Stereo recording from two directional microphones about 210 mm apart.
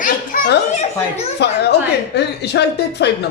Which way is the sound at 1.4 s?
55° left (ahead or behind).